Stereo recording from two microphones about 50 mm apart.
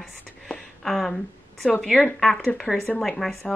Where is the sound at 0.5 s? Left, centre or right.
Centre.